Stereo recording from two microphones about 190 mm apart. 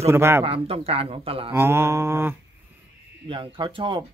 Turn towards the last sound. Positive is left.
turn(degrees=-25)  # may be behind; listen again after turning